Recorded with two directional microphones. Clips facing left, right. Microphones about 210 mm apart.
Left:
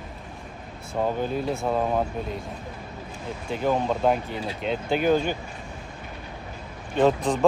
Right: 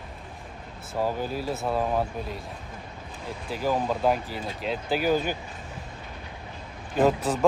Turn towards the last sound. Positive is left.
turn(degrees=-5)  # may be behind; listen again after turning